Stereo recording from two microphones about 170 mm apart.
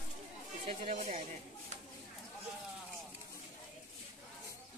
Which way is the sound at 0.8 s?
40° right (ahead or behind).